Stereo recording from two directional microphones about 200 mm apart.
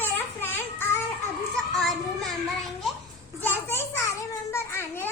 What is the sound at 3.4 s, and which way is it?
Children playing, 10° left (ahead or behind).